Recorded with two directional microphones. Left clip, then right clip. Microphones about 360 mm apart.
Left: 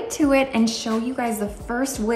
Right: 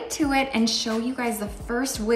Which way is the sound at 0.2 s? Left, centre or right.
Centre.